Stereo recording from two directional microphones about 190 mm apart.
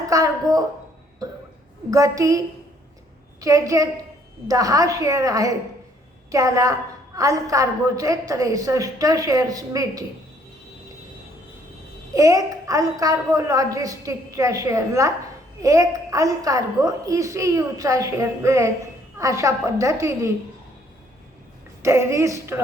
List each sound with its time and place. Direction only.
0.1 s a woman's voice: 15° right (ahead or behind)
1.2 s cough: 20° right (ahead or behind)
1.9 s a woman's voice: 15° right (ahead or behind)
3.4 s a woman's voice: 15° right (ahead or behind)
12.1 s a woman's voice: 20° right (ahead or behind)
21.8 s a woman's voice: 15° right (ahead or behind)